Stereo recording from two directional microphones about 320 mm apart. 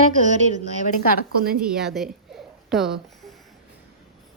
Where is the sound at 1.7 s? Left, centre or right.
Centre.